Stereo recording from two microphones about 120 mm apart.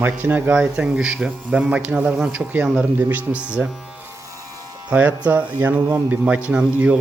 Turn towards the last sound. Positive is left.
turn(degrees=-10)  # may be behind; listen again after turning